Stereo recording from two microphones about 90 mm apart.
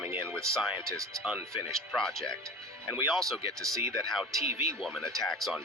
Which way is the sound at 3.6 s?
40° right (ahead or behind).